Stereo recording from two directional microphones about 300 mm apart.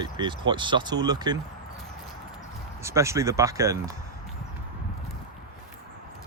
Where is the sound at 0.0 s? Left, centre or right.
Centre.